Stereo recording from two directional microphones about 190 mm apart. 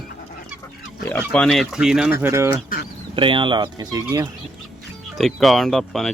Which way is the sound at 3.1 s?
25° right (ahead or behind).